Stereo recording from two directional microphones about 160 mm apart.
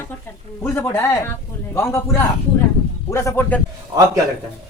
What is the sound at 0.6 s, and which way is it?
A man's voice, 10° left (ahead or behind).